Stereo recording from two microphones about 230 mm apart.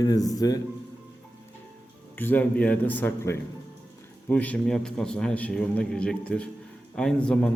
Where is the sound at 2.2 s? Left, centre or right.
Centre.